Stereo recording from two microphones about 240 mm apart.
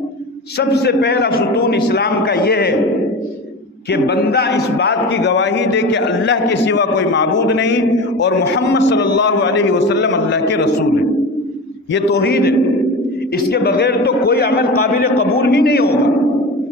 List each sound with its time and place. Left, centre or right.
0.6 s a man's voice: left
3.9 s a man's voice: left
11.9 s a man's voice: left